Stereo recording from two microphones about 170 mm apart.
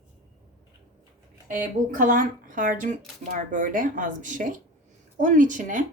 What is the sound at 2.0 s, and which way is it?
A woman's voice, 50° right (ahead or behind).